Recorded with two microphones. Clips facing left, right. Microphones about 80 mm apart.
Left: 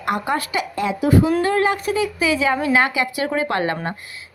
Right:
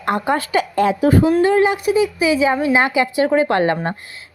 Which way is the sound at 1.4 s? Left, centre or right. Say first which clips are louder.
Right 4 dB; centre.